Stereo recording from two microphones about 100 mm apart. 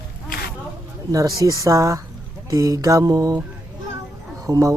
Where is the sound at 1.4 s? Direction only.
35° right (ahead or behind).